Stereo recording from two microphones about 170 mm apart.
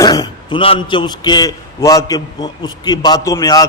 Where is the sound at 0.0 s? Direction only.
25° left (ahead or behind).